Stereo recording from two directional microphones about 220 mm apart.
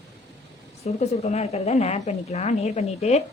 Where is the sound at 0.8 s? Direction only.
30° left (ahead or behind).